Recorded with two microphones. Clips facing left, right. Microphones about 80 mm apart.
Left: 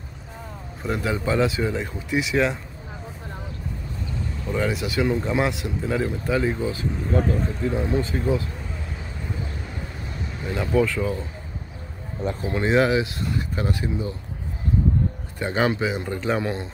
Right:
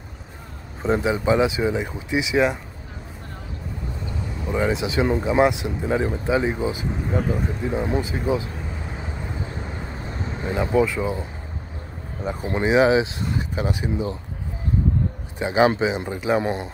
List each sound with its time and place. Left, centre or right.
0.8 s speech: right
4.5 s speech: centre
9.4 s vehicle: right
12.2 s speech: centre
12.6 s speech: centre
15.3 s speech: centre
16.1 s speech: centre
16.3 s speech: right